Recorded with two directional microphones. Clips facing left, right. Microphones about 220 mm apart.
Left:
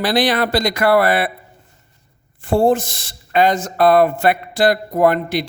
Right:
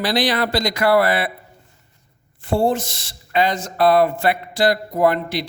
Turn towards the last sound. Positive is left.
turn(degrees=50)  # may be behind; listen again after turning